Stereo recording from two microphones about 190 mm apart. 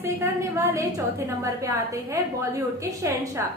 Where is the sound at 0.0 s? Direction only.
15° right (ahead or behind).